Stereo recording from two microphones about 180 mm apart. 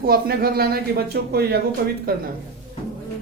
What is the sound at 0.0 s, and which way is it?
Speech, 55° right (ahead or behind).